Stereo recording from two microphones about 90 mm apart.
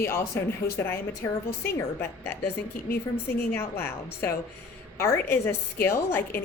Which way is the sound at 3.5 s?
25° left (ahead or behind).